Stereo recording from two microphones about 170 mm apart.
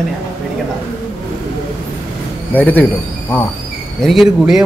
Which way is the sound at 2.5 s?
10° left (ahead or behind).